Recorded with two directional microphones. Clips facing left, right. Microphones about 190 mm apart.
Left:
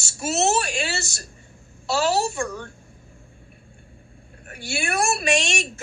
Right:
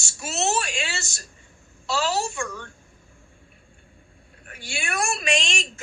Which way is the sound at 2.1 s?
35° left (ahead or behind).